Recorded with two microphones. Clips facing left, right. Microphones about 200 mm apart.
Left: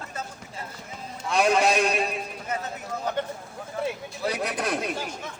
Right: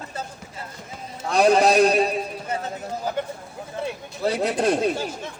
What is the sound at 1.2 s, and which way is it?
A man's voice, 35° right (ahead or behind).